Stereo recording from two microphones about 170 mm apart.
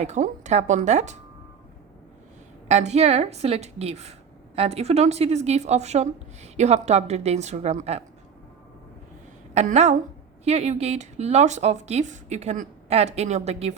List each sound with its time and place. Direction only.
0.0 s speech: 45° right (ahead or behind)
2.6 s speech: 40° right (ahead or behind)
9.6 s speech: 40° right (ahead or behind)